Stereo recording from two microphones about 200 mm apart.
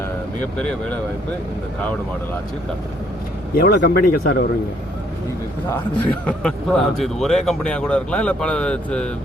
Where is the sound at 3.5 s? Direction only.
50° left (ahead or behind).